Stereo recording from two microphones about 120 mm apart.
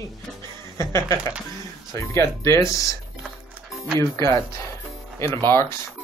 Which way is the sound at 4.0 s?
25° left (ahead or behind).